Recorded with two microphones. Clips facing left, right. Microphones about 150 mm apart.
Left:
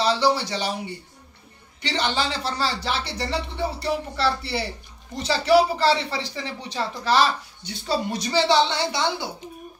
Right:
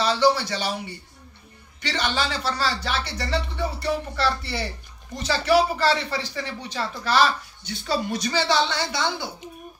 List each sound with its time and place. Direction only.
0.0 s speech: 30° left (ahead or behind)
1.8 s speech: 30° left (ahead or behind)